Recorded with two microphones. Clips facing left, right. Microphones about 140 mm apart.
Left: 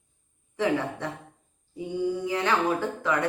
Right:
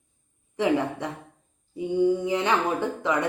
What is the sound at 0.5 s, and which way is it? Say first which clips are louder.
Speech: right 3 dB; 15° right (ahead or behind).